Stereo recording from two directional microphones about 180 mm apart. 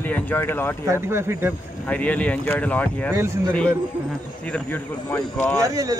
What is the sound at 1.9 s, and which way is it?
Speech, 10° left (ahead or behind).